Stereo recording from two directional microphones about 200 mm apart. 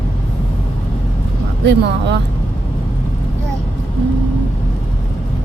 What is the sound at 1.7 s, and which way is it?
Speech, 55° right (ahead or behind).